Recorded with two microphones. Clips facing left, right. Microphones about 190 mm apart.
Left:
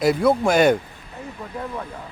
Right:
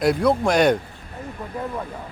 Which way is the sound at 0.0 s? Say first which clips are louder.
Left 1 dB; centre (ahead or behind).